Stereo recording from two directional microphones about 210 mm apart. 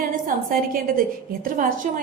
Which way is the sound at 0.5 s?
45° right (ahead or behind).